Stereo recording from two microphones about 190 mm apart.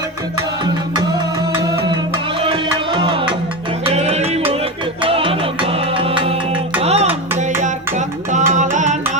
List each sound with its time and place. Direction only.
2.4 s music: 25° right (ahead or behind)